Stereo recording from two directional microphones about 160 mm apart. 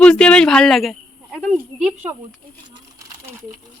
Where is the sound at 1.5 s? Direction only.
10° right (ahead or behind).